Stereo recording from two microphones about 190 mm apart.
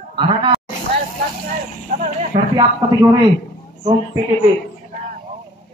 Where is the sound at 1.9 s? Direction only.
40° right (ahead or behind).